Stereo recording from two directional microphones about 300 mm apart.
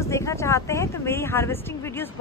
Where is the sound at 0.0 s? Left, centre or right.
Centre.